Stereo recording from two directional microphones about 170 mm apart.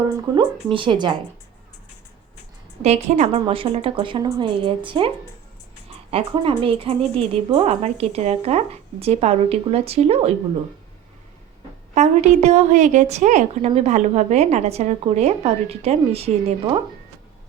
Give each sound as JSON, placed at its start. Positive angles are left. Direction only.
{"t": 0.3, "sound": "a woman's voice", "side_deg": -30}
{"t": 2.8, "sound": "a woman's voice", "side_deg": -40}
{"t": 11.9, "sound": "a woman's voice", "side_deg": -40}